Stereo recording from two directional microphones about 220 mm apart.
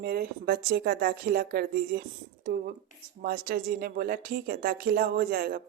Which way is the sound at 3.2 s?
40° right (ahead or behind).